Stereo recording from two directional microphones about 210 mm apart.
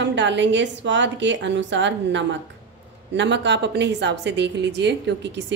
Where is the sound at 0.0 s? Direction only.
60° right (ahead or behind).